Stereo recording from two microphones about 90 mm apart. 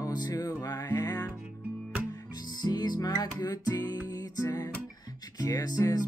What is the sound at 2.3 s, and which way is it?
Music, 45° left (ahead or behind).